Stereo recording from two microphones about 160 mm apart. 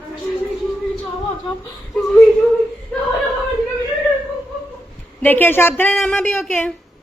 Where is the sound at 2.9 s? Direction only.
10° left (ahead or behind).